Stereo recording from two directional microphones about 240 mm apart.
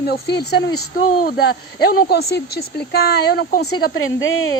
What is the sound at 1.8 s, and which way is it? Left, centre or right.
Speech, left.